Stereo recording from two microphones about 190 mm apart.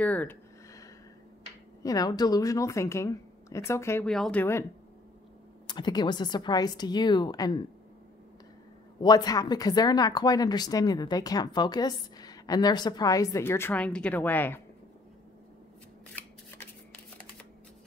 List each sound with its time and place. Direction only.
0.0 s a sound: 10° left (ahead or behind)
1.8 s a woman's voice: 20° left (ahead or behind)
5.7 s a woman's voice: 20° left (ahead or behind)
9.0 s a woman's voice: 20° left (ahead or behind)